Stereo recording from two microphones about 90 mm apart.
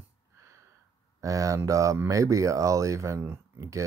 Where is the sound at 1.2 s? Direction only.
35° right (ahead or behind).